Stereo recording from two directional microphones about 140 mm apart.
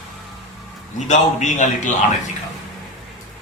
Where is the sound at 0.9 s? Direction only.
60° left (ahead or behind).